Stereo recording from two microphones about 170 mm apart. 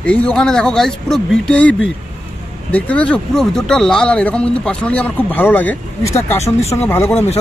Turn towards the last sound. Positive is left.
turn(degrees=10)  # may be behind; listen again after turning